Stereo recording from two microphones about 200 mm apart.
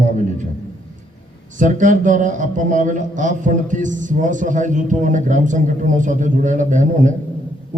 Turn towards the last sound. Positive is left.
turn(degrees=-40)  # may be behind; listen again after turning